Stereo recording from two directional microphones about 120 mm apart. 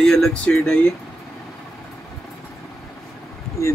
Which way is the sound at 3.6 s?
25° left (ahead or behind).